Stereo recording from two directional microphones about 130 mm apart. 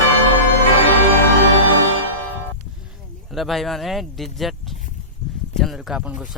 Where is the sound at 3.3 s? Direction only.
Centre (ahead or behind).